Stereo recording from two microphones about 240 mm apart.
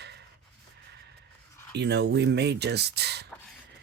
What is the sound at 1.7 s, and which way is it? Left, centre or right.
Speech, right.